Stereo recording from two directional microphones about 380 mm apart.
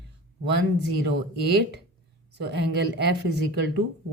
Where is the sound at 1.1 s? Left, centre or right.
Right.